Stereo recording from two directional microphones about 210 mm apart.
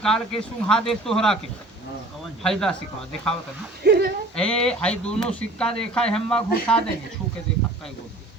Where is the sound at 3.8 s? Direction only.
50° right (ahead or behind).